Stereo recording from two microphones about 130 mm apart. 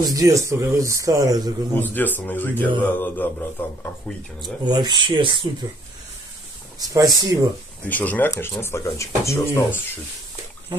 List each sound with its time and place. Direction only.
0.0 s speech: 25° right (ahead or behind)
1.8 s speech: 15° left (ahead or behind)
4.4 s speech: 35° right (ahead or behind)
6.8 s speech: 30° right (ahead or behind)
7.9 s speech: 15° left (ahead or behind)